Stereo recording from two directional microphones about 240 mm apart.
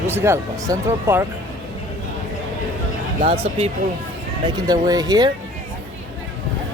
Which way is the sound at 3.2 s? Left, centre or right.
Right.